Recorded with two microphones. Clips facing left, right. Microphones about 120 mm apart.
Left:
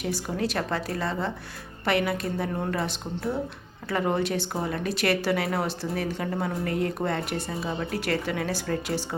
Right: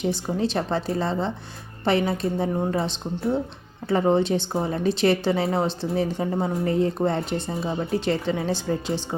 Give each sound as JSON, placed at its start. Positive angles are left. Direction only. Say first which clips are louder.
{"t": 0.0, "sound": "speech", "louder": "right 4 dB", "side_deg": -25}